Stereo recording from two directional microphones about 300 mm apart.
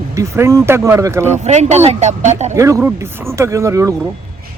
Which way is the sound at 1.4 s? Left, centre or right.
Right.